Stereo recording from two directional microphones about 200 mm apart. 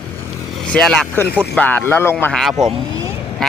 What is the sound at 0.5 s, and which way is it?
Speech, 5° left (ahead or behind).